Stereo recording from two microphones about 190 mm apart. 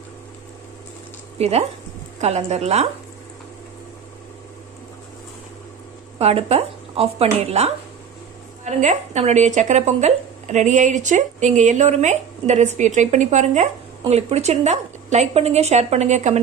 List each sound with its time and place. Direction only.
1.4 s speech: 35° right (ahead or behind)
6.1 s speech: 35° right (ahead or behind)